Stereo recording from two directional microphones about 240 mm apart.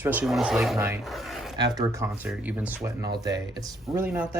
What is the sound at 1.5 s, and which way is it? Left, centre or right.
Speech, centre.